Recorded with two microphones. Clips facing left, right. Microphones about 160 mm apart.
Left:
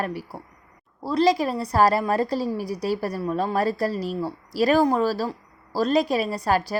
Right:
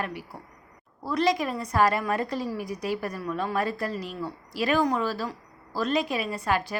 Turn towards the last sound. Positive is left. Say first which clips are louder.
# left 4 dB
turn(degrees=40)  # may be behind; listen again after turning